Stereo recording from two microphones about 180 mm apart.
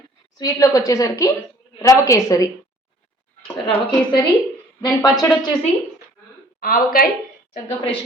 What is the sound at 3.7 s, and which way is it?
Speech, 25° left (ahead or behind).